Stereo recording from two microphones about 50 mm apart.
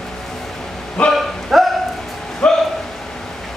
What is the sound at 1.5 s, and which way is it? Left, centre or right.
Bow-wow, centre.